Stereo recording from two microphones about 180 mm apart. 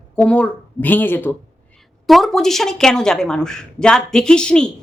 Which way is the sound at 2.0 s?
Centre (ahead or behind).